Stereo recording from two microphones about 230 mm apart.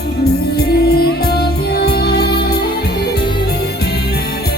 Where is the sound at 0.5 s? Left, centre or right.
Left.